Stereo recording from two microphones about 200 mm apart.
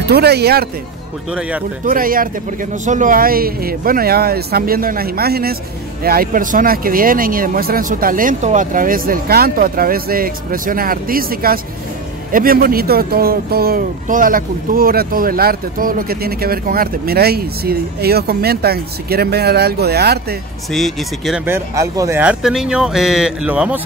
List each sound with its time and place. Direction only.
0.1 s speech: 55° right (ahead or behind)
1.9 s speech: 45° right (ahead or behind)
20.7 s speech: centre (ahead or behind)
21.5 s speech: 15° right (ahead or behind)